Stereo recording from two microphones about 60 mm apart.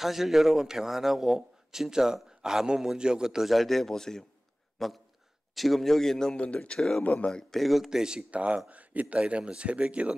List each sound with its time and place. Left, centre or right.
0.0 s a man's voice: centre; by 7.3 s left
7.3 s speech: centre
8.3 s speech: right